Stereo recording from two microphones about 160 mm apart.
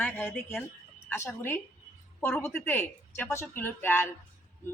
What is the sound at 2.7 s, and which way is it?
Speech, 10° left (ahead or behind).